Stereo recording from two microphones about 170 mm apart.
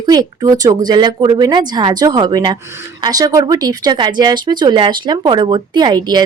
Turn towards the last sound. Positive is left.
turn(degrees=-25)  # may be behind; listen again after turning